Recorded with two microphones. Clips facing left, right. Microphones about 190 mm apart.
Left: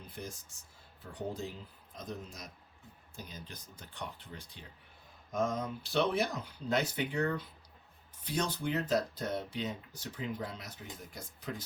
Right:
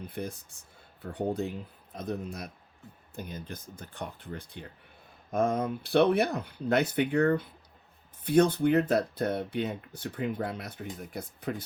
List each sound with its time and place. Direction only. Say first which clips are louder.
0.1 s speech: right 8 dB; 60° right (ahead or behind)